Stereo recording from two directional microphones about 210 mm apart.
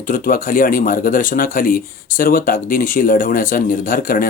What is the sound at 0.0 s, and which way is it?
Speech, 40° left (ahead or behind).